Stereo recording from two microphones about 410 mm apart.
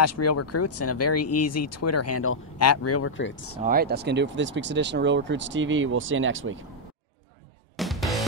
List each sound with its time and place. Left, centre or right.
0.0 s speech: left
3.6 s speech: right
7.7 s music: centre